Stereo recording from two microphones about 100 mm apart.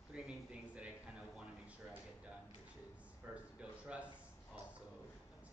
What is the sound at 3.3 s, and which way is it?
Speech, 15° right (ahead or behind).